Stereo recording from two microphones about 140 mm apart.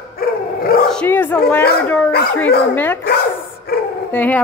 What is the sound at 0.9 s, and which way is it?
Speech, 15° left (ahead or behind).